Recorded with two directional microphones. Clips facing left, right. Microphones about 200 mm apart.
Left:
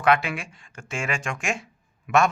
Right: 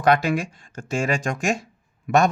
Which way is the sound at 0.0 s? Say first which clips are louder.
Right 3 dB; 40° right (ahead or behind).